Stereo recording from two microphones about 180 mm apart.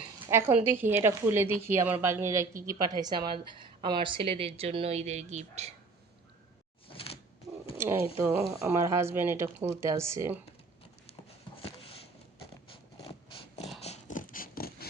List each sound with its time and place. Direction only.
0.3 s a woman's voice: 10° right (ahead or behind); by 5.7 s 40° right (ahead or behind)
6.8 s door: 30° left (ahead or behind)
8.1 s speech: 15° right (ahead or behind)
11.3 s a sound: 30° left (ahead or behind)
13.0 s mechanisms: 30° left (ahead or behind)
13.8 s a sound: 40° left (ahead or behind)